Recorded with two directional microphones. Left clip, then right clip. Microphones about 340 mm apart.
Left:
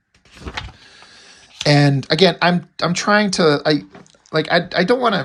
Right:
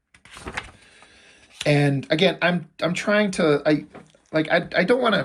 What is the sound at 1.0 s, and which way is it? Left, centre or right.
Speech, centre.